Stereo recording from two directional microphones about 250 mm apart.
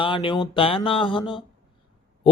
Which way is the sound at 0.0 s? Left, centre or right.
Centre.